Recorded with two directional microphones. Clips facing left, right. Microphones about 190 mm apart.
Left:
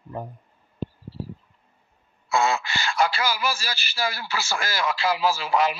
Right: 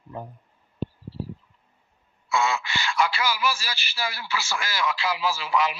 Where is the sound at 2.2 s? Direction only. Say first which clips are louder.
Left 2 dB; 40° left (ahead or behind).